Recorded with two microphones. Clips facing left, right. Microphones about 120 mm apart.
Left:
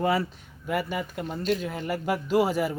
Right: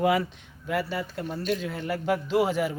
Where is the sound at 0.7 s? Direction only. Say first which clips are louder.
Even; 10° left (ahead or behind).